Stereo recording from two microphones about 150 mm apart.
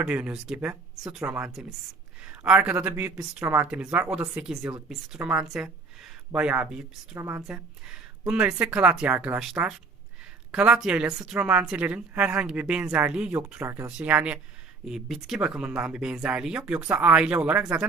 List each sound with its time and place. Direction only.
0.0 s a woman's voice: 5° right (ahead or behind)
7.2 s a woman's voice: 15° right (ahead or behind)